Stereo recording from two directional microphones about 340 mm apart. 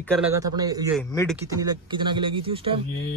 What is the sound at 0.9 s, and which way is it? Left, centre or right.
Speech, centre.